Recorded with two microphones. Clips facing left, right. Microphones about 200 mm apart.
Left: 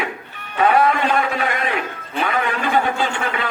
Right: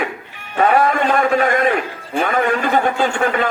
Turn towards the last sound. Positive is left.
turn(degrees=-45)  # may be behind; listen again after turning